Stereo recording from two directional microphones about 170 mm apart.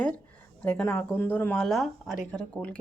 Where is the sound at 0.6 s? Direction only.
10° left (ahead or behind).